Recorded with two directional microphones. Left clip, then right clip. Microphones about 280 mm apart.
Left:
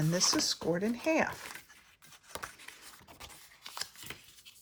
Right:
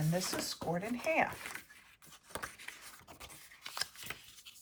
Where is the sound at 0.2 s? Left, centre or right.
Left.